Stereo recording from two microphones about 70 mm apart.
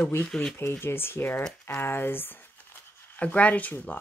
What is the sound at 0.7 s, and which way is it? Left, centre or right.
Speech, left.